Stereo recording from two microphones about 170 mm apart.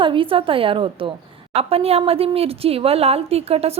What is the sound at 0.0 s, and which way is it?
Speech, 30° right (ahead or behind).